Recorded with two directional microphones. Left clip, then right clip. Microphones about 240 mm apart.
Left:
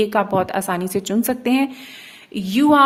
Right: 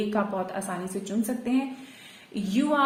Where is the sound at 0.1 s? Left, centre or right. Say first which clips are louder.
Left 10 dB; left.